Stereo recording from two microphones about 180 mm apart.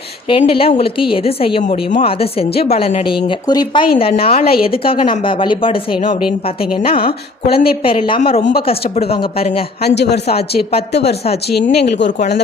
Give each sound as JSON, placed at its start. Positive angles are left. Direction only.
{"t": 0.3, "sound": "speech", "side_deg": 30}
{"t": 4.2, "sound": "speech", "side_deg": 55}
{"t": 4.6, "sound": "speech", "side_deg": 30}
{"t": 7.4, "sound": "speech", "side_deg": 55}
{"t": 7.9, "sound": "speech", "side_deg": 30}
{"t": 9.8, "sound": "speech", "side_deg": 65}
{"t": 11.5, "sound": "speech", "side_deg": 65}